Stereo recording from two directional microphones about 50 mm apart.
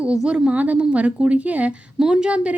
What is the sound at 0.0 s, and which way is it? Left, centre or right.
A woman's voice, centre.